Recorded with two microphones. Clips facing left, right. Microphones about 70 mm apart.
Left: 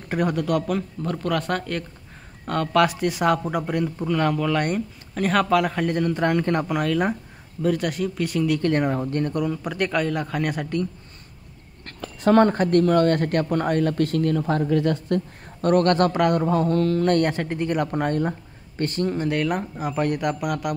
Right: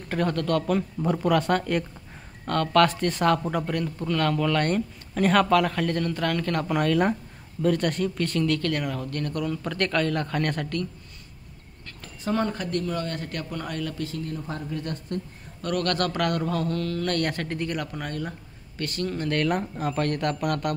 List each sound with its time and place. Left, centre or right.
0.1 s speech: centre
0.7 s speech: centre
2.4 s speech: centre
6.7 s speech: centre
8.7 s speech: left; by 10.9 s centre
11.8 s speech: left
15.6 s a man's voice: left
17.9 s a man's voice: left
19.3 s speech: centre